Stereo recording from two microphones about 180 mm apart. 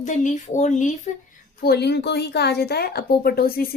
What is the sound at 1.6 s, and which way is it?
A woman's voice, 65° left (ahead or behind).